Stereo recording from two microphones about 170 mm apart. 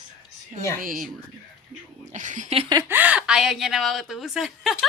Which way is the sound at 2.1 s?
45° right (ahead or behind).